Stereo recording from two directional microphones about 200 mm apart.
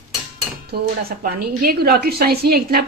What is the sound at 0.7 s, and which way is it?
A woman's voice, 50° right (ahead or behind).